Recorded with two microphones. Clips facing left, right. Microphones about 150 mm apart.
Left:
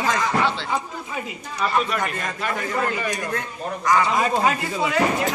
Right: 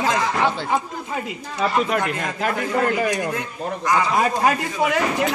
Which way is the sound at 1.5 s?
90° right.